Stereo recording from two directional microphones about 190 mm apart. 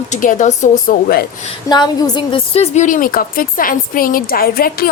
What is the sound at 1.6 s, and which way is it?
A woman's voice, 20° left (ahead or behind).